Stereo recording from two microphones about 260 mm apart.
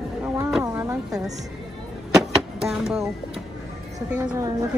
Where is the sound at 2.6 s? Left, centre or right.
Centre.